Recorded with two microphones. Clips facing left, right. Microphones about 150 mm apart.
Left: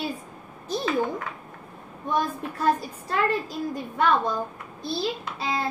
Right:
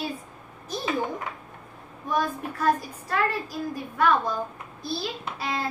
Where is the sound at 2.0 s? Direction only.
25° left (ahead or behind).